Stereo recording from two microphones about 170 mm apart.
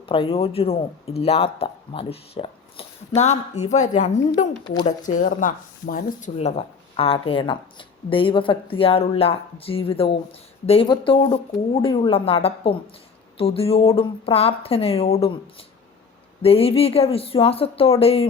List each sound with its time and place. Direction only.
0.0 s speech: 30° left (ahead or behind)
4.6 s speech: 25° left (ahead or behind)
4.9 s speech: 50° left (ahead or behind)
16.4 s speech: 35° left (ahead or behind)